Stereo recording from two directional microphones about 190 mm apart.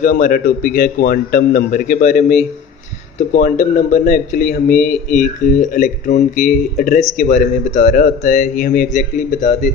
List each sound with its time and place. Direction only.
0.0 s speech: 45° left (ahead or behind)